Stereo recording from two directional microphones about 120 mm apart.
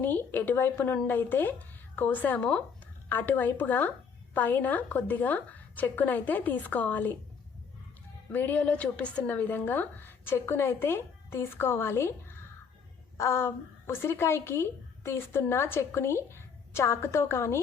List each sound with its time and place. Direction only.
0.0 s a woman's voice: 15° left (ahead or behind)
8.3 s a woman's voice: 15° left (ahead or behind)
13.1 s a woman's voice: 20° left (ahead or behind)